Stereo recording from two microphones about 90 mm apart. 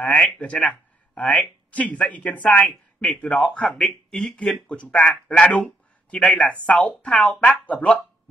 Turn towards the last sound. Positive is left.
turn(degrees=15)  # may be behind; listen again after turning